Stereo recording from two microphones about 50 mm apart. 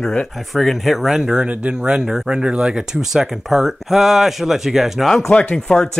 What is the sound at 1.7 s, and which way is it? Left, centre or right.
Speech, centre.